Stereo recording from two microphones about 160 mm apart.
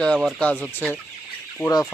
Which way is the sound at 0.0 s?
5° left (ahead or behind).